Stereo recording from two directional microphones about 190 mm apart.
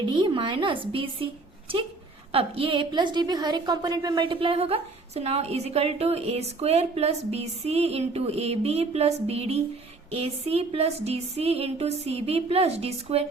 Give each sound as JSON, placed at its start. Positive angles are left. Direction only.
{"t": 0.2, "sound": "a woman's voice", "side_deg": -25}
{"t": 2.3, "sound": "a woman's voice", "side_deg": -30}